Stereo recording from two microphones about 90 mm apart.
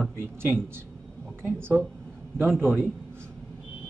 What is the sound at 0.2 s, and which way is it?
Speech, 25° right (ahead or behind).